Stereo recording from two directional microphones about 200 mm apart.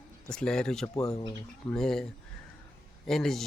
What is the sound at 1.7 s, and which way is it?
Speech, centre (ahead or behind).